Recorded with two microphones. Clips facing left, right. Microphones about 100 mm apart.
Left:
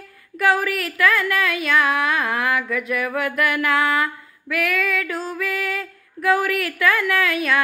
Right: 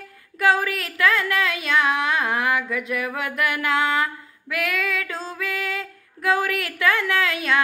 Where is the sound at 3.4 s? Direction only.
25° right (ahead or behind).